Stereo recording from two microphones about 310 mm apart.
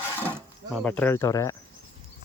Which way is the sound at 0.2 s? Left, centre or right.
Centre.